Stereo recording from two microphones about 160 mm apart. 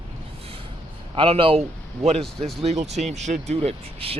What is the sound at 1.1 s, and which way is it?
A man's voice, 35° right (ahead or behind).